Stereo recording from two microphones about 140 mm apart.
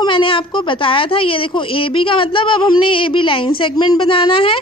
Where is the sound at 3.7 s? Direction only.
25° left (ahead or behind).